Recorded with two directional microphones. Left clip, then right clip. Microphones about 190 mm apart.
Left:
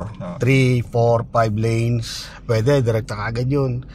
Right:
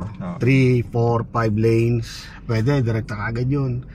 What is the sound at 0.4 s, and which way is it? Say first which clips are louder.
Speech: even; 20° left (ahead or behind).